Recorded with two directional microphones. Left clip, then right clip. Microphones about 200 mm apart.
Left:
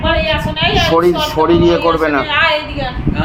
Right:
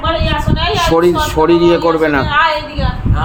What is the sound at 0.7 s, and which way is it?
Speech, 35° right (ahead or behind).